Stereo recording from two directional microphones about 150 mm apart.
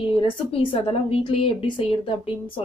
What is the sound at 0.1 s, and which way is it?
Speech, 35° left (ahead or behind).